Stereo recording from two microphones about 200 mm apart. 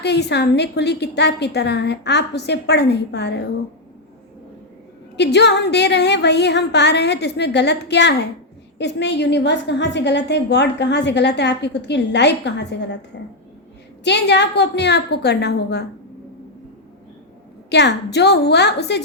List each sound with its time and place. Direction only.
0.0 s a woman's voice: 60° left (ahead or behind)
5.1 s a woman's voice: 60° left (ahead or behind)
14.0 s a woman's voice: 60° left (ahead or behind)
17.7 s a woman's voice: 60° left (ahead or behind)